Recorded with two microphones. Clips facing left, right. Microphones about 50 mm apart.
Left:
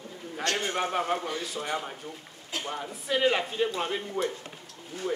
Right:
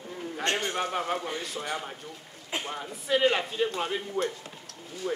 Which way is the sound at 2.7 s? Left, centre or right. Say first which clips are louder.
Right 2 dB; centre.